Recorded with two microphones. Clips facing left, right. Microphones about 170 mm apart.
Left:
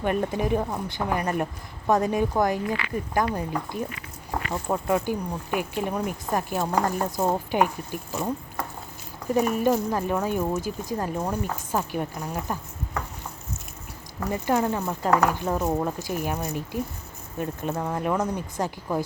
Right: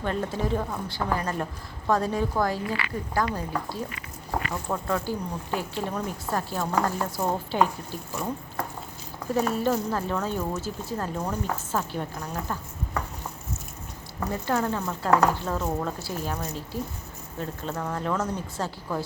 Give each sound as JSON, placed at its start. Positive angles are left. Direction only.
{"t": 0.0, "sound": "speech", "side_deg": 15}
{"t": 9.3, "sound": "speech", "side_deg": 15}
{"t": 14.3, "sound": "speech", "side_deg": 15}